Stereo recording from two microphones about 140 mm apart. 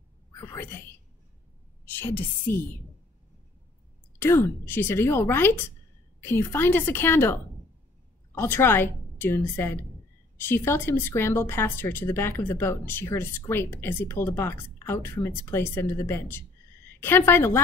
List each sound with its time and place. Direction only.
0.4 s speech: 15° left (ahead or behind)
1.9 s speech: 15° left (ahead or behind)
4.2 s speech: 20° left (ahead or behind)
8.4 s speech: 15° left (ahead or behind)